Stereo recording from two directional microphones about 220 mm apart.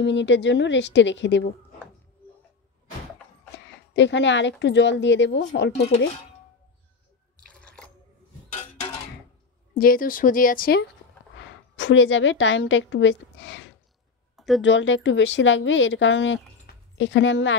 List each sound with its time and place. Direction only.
0.0 s a woman's voice: 55° left (ahead or behind)
3.5 s a woman's voice: 55° left (ahead or behind)
7.4 s drip: 5° left (ahead or behind)
9.8 s speech: 40° left (ahead or behind)
11.3 s a woman's voice: 55° left (ahead or behind)
14.3 s a sound: centre (ahead or behind)
14.6 s speech: 55° left (ahead or behind)